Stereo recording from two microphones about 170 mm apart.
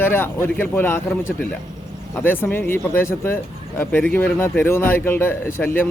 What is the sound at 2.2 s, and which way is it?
Speech, 10° left (ahead or behind).